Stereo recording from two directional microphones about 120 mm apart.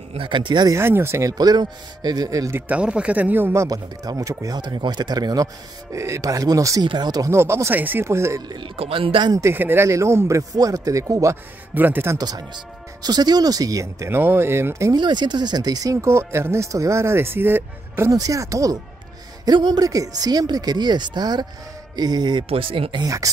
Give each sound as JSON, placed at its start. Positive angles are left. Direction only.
{"t": 0.1, "sound": "speech", "side_deg": -45}
{"t": 0.7, "sound": "speech", "side_deg": -20}
{"t": 2.7, "sound": "speech", "side_deg": -10}
{"t": 3.6, "sound": "speech", "side_deg": -30}
{"t": 8.5, "sound": "speech", "side_deg": -50}
{"t": 9.3, "sound": "speech", "side_deg": -20}
{"t": 11.7, "sound": "speech", "side_deg": -15}
{"t": 12.2, "sound": "speech", "side_deg": -35}
{"t": 15.0, "sound": "speech", "side_deg": -40}
{"t": 22.5, "sound": "speech", "side_deg": -50}
{"t": 23.0, "sound": "speech", "side_deg": -30}